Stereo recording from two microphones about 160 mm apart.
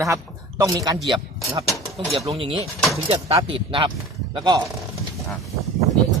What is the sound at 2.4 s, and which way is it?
Speech, 35° right (ahead or behind).